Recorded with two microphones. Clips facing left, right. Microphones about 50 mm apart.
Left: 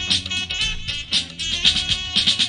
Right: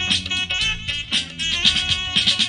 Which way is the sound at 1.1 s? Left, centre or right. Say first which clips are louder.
Right 2 dB; centre.